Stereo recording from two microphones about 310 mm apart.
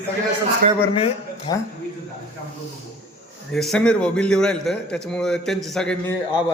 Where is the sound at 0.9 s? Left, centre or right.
Centre.